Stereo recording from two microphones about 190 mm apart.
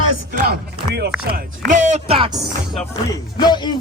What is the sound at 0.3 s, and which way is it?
Chop, 55° right (ahead or behind).